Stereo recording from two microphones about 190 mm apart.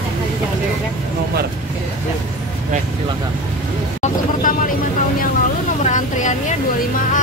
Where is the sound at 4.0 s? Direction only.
45° left (ahead or behind).